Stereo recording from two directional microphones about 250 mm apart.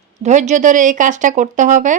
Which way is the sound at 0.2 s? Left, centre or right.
Right.